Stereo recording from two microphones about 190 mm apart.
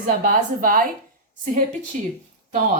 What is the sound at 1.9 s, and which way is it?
Speech, 40° right (ahead or behind).